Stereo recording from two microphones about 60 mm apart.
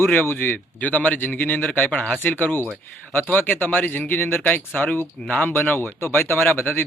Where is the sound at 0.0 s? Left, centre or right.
Left.